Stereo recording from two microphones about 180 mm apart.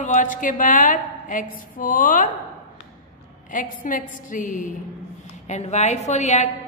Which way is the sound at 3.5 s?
45° left (ahead or behind).